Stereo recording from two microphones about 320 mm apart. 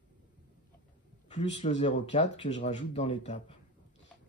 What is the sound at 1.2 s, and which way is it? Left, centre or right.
Speech, left.